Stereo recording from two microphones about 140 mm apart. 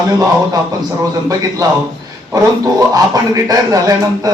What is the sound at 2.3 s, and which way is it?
A man's voice, 25° right (ahead or behind).